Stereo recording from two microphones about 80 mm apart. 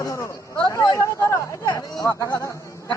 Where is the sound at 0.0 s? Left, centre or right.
Left.